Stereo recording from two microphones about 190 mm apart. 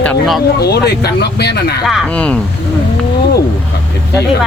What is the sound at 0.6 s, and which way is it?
Speech, 55° left (ahead or behind).